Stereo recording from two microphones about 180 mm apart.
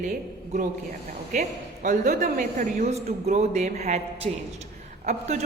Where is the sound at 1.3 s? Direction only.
45° right (ahead or behind).